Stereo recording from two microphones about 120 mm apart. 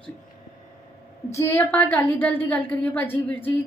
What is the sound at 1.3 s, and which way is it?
Speech, 20° left (ahead or behind).